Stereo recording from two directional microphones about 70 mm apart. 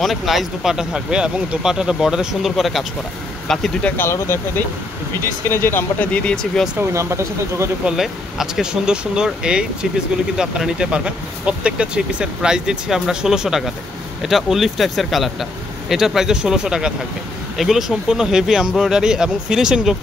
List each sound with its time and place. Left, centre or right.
0.0 s speech: centre
3.9 s speech: left
5.5 s speech: left
6.1 s speech: centre
6.8 s speech: right
7.8 s speech: centre